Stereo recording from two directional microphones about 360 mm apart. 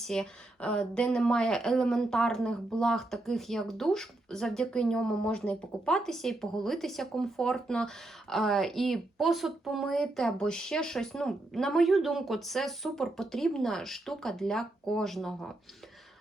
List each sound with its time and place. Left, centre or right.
0.0 s speech: centre